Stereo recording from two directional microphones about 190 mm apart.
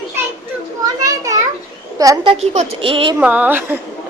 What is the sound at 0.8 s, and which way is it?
A woman's voice, 20° right (ahead or behind).